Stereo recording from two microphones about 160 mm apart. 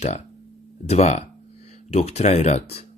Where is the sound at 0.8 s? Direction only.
40° left (ahead or behind).